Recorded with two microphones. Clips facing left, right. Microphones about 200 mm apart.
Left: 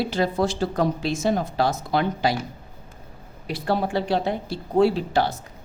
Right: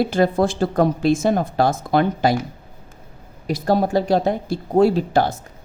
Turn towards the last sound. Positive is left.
turn(degrees=-45)  # may be behind; listen again after turning